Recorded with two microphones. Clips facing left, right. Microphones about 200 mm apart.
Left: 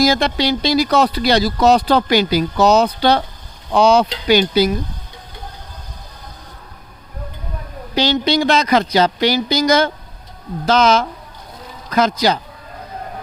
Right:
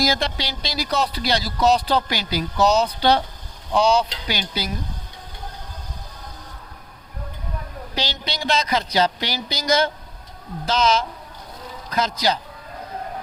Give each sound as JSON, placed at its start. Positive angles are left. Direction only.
{"t": 0.0, "sound": "speech", "side_deg": 65}
{"t": 7.9, "sound": "speech", "side_deg": 60}